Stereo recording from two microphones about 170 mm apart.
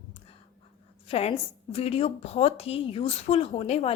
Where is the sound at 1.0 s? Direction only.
35° left (ahead or behind).